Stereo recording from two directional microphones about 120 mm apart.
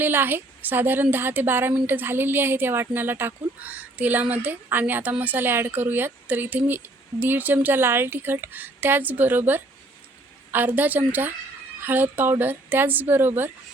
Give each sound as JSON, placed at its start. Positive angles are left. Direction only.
{"t": 0.0, "sound": "speech", "side_deg": -15}